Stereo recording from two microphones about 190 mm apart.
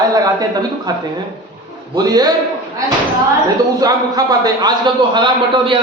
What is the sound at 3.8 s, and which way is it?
A man's voice, 20° right (ahead or behind).